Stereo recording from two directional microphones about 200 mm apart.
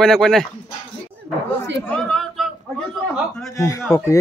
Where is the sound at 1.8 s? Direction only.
5° left (ahead or behind).